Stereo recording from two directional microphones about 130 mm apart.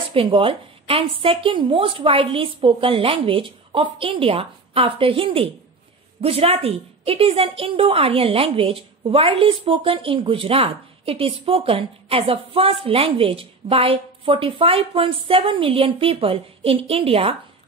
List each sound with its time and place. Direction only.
0.1 s a woman's voice: 45° right (ahead or behind)